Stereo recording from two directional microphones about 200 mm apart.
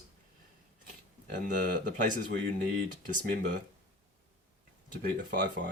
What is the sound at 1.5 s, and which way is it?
Speech, 40° right (ahead or behind).